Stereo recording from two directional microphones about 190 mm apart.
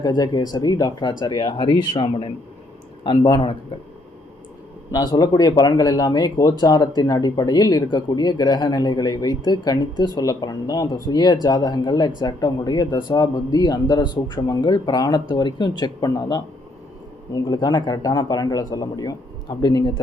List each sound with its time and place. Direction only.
0.0 s speech: 20° left (ahead or behind)
4.9 s speech: 20° left (ahead or behind)
17.5 s speech: 20° left (ahead or behind)